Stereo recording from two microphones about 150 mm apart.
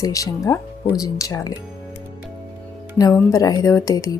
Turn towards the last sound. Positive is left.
turn(degrees=25)  # may be behind; listen again after turning